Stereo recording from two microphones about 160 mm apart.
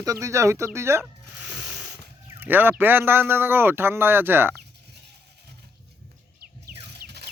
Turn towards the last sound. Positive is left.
turn(degrees=-85)